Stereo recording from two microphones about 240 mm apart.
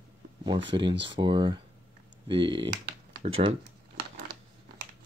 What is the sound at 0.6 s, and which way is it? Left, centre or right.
Speech, centre.